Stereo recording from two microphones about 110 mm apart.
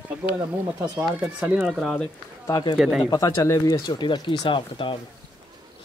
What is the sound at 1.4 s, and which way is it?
Speech, 10° right (ahead or behind).